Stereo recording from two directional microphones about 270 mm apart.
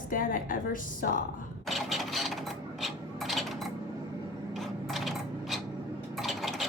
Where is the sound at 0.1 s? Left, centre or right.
Left.